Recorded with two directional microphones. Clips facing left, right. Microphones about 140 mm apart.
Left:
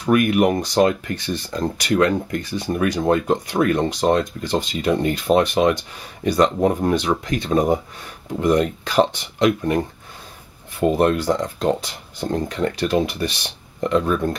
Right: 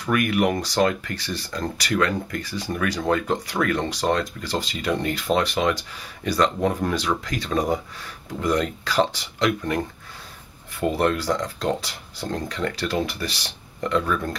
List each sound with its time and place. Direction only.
0.0 s speech: 20° left (ahead or behind)